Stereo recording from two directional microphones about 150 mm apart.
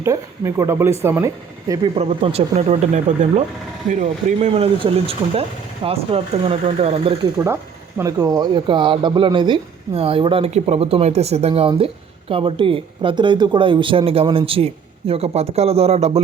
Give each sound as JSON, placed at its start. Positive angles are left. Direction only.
{"t": 0.0, "sound": "speech", "side_deg": -20}
{"t": 2.0, "sound": "speech", "side_deg": -45}
{"t": 7.3, "sound": "speech", "side_deg": -15}